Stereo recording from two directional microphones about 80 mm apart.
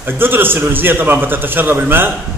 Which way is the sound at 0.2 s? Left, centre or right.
Right.